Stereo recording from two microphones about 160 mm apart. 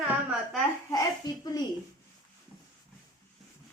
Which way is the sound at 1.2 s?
25° left (ahead or behind).